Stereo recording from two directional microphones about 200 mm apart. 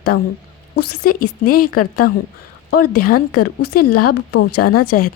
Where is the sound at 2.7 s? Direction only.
50° left (ahead or behind).